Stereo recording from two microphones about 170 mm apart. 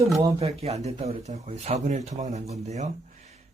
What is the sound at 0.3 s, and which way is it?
Speech, 35° right (ahead or behind).